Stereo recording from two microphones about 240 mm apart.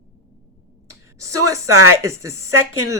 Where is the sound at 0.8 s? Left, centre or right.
Right.